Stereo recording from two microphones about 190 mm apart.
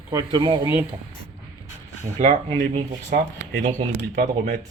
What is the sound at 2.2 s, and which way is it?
Speech, 40° right (ahead or behind).